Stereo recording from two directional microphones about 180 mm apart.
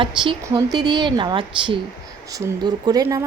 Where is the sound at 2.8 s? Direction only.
20° right (ahead or behind).